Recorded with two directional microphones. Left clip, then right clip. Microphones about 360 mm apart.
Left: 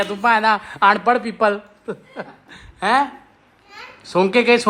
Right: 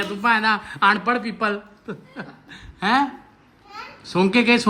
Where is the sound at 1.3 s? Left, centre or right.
Left.